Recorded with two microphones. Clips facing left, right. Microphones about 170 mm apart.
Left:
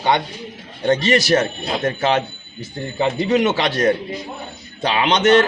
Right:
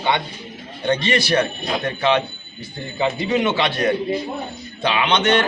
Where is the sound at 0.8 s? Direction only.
40° left (ahead or behind).